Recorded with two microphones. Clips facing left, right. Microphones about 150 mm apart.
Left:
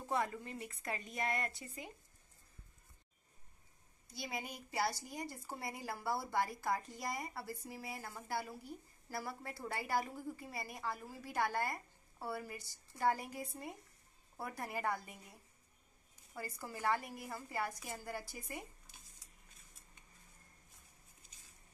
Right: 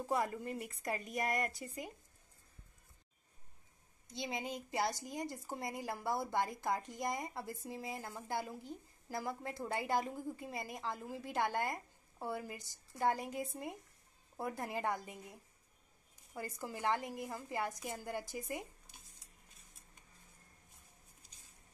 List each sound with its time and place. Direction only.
0.1 s a woman's voice: 5° right (ahead or behind)
4.1 s a woman's voice: 20° right (ahead or behind)
16.3 s a woman's voice: 20° right (ahead or behind)